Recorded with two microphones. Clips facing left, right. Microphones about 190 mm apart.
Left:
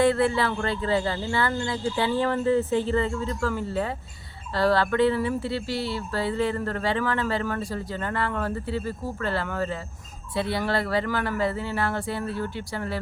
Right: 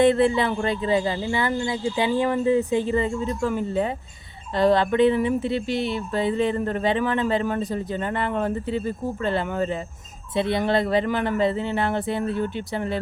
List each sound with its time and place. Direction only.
0.0 s speech: 20° right (ahead or behind)